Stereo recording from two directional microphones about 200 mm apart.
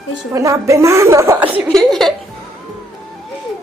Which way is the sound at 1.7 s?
Centre (ahead or behind).